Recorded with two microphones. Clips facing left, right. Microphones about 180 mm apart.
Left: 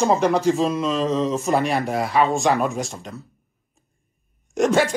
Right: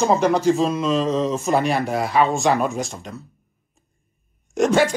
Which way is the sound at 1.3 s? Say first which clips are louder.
Right 1 dB; centre (ahead or behind).